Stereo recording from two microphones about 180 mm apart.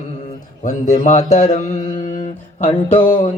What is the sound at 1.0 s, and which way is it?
Mantra, 40° left (ahead or behind).